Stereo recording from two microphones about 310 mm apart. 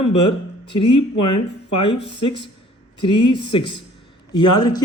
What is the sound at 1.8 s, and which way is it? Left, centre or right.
Speech, centre.